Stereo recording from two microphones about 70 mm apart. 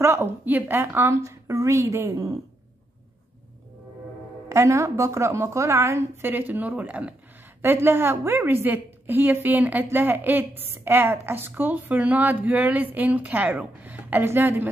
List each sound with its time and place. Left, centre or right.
0.0 s a woman's voice: right
4.5 s a woman's voice: right
6.2 s a woman's voice: right
7.6 s a woman's voice: right